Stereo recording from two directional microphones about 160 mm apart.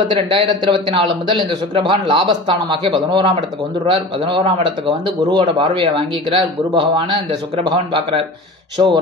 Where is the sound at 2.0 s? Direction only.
30° right (ahead or behind).